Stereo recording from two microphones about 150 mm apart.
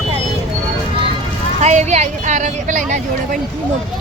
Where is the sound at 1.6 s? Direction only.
50° right (ahead or behind).